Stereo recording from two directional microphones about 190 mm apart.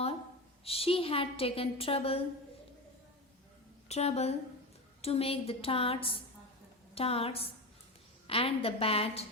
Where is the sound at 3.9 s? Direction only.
35° left (ahead or behind).